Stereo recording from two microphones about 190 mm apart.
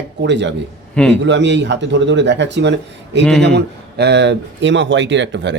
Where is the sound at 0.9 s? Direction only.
5° left (ahead or behind).